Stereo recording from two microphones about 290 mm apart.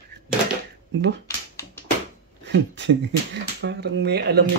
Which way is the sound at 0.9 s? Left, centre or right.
Right.